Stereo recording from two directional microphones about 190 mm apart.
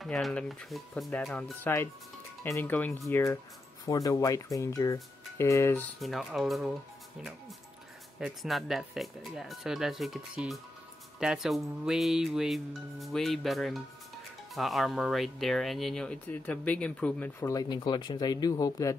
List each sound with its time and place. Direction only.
0.0 s speech: centre (ahead or behind)
5.9 s speech: centre (ahead or behind)
8.2 s speech: centre (ahead or behind); by 18.9 s 20° left (ahead or behind)